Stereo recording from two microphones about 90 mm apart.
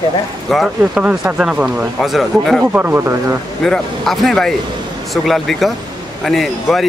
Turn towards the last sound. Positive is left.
turn(degrees=0)  # may be behind; listen again after turning